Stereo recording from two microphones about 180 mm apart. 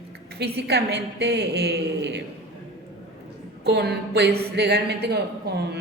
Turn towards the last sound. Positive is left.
turn(degrees=-65)  # may be behind; listen again after turning